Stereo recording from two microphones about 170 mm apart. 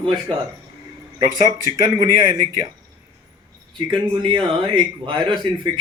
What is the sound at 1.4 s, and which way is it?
A man's voice, 20° right (ahead or behind).